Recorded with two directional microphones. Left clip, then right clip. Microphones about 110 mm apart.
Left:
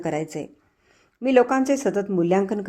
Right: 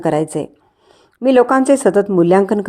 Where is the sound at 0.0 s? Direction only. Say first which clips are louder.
Right 10 dB; 30° right (ahead or behind).